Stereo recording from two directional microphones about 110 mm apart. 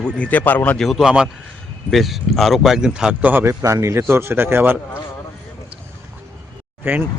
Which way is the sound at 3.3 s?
20° right (ahead or behind).